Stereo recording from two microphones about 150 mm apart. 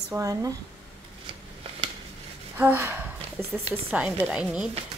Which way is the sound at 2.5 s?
15° right (ahead or behind).